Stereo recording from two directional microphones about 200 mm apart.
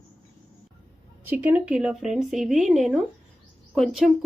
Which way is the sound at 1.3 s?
10° right (ahead or behind).